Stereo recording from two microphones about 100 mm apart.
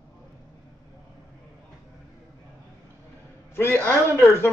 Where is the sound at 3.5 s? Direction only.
25° left (ahead or behind).